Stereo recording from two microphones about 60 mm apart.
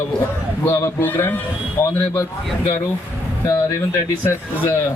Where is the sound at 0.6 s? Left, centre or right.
Left.